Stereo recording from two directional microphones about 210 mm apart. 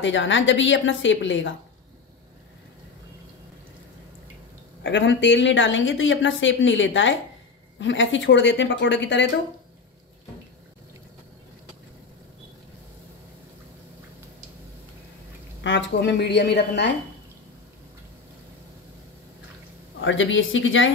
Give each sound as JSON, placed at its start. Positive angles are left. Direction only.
{"t": 0.0, "sound": "speech", "side_deg": 60}
{"t": 4.8, "sound": "speech", "side_deg": 60}
{"t": 15.6, "sound": "speech", "side_deg": 60}
{"t": 20.0, "sound": "speech", "side_deg": 65}